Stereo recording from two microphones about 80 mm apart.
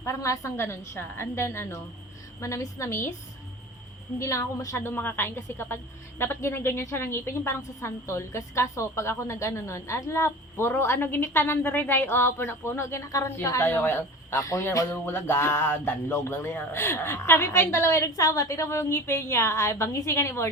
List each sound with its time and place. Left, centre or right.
0.0 s a woman's voice: left
4.2 s a woman's voice: left
4.9 s a woman's voice: left
14.4 s a woman's voice: left
14.8 s a woman's voice: left